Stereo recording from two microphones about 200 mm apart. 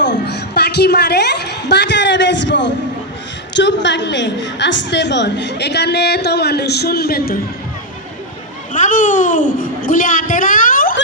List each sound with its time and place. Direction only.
0.3 s a sound: 55° left (ahead or behind)
3.5 s a woman's voice: 60° left (ahead or behind)
8.7 s a child's voice: 40° left (ahead or behind)